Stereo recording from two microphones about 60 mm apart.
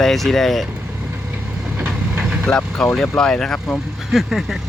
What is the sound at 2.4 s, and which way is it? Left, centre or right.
Speech, centre.